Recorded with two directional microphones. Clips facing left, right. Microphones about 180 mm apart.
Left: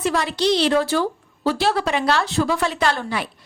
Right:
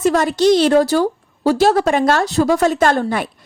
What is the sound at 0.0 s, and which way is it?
A woman's voice, 45° right (ahead or behind).